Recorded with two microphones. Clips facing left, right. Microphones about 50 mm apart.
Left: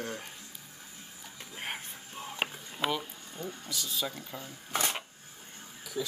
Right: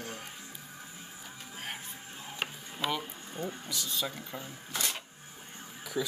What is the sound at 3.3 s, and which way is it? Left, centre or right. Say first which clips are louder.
Speech: right 3 dB; right.